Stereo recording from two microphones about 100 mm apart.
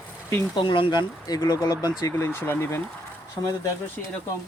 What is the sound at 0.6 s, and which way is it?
Speech, 60° left (ahead or behind).